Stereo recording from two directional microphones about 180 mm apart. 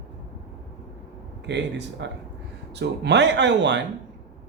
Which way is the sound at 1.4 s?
75° right (ahead or behind).